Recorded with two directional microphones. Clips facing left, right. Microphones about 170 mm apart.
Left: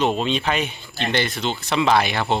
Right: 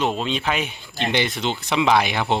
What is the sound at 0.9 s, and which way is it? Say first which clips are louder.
Speech: right 1 dB; 15° right (ahead or behind).